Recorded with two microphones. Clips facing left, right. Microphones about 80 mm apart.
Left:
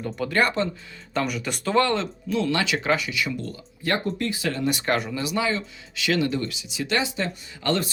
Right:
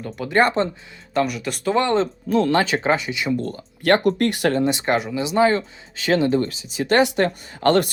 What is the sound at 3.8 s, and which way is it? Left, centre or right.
Speech, right.